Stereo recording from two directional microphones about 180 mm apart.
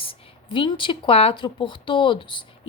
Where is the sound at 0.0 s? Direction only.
30° left (ahead or behind).